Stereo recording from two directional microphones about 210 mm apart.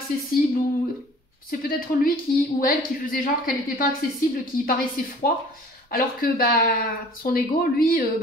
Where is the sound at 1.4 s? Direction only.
45° left (ahead or behind).